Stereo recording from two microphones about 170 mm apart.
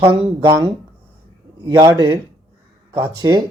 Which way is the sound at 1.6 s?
20° right (ahead or behind).